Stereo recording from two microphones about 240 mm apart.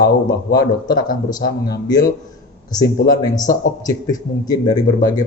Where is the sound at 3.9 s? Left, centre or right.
Centre.